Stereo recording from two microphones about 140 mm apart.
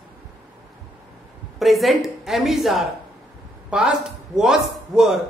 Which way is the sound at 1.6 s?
Centre (ahead or behind).